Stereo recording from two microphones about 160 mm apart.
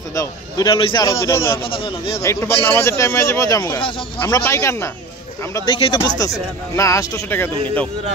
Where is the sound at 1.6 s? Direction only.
35° left (ahead or behind).